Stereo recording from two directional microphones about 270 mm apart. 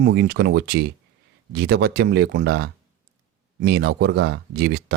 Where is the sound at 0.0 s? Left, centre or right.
Right.